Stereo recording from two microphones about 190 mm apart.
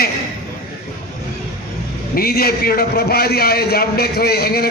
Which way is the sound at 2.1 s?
55° left (ahead or behind).